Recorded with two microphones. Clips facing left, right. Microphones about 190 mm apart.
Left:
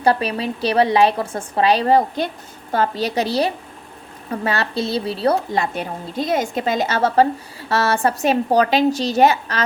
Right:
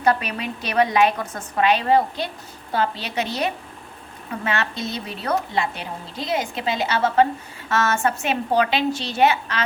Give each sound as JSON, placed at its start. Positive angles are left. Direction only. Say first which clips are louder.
{"t": 0.0, "sound": "a woman's voice", "louder": "left 3 dB", "side_deg": 30}
{"t": 5.7, "sound": "a woman's voice", "louder": "left 7 dB", "side_deg": 45}